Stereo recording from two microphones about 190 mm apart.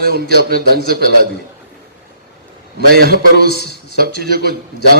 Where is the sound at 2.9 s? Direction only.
55° right (ahead or behind).